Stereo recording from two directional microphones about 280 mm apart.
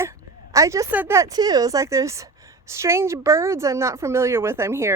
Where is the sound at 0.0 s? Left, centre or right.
Centre.